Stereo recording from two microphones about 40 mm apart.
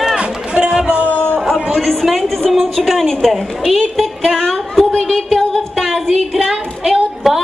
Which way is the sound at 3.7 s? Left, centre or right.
Centre.